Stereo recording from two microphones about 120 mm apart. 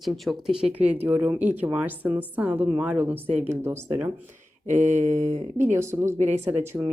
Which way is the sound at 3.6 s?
25° right (ahead or behind).